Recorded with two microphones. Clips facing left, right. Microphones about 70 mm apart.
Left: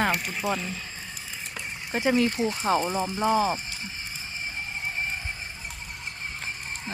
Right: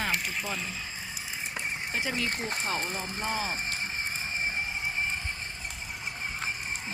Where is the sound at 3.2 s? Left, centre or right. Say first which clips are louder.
Left 10 dB; left.